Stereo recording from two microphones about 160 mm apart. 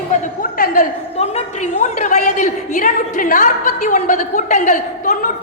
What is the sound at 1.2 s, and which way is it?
A woman's voice, 45° left (ahead or behind).